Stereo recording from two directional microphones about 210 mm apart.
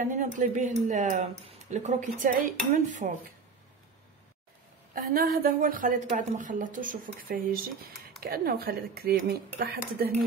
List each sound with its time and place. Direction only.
0.0 s a woman's voice: 35° right (ahead or behind)
4.9 s a woman's voice: 45° right (ahead or behind)